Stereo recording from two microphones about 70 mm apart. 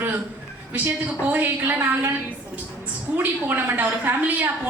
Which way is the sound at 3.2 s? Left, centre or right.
Right.